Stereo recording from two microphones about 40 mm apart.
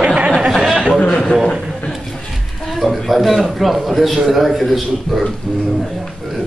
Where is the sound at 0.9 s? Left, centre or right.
Left.